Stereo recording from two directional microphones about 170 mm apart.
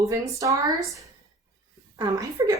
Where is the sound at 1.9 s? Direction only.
20° right (ahead or behind).